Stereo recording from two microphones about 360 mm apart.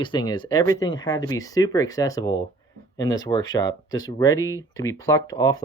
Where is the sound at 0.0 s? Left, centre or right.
Centre.